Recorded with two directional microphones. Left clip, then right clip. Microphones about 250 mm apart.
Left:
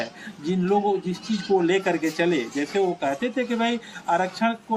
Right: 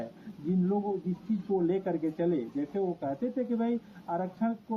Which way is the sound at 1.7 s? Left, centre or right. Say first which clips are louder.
Left 8 dB; centre.